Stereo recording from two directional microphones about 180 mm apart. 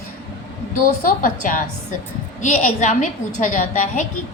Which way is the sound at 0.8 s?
50° left (ahead or behind).